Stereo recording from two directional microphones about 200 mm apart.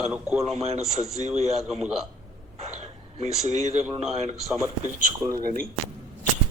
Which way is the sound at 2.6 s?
35° right (ahead or behind).